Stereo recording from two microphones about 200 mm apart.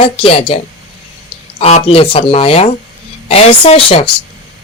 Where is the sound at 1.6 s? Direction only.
30° left (ahead or behind).